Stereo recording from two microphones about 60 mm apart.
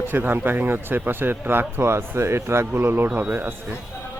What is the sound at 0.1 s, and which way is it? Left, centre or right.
Speech, right.